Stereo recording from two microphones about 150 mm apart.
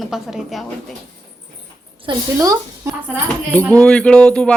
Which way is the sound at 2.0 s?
25° right (ahead or behind).